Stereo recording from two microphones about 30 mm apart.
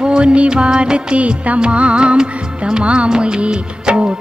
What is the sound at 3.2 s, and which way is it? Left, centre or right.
Music of bollywood, right.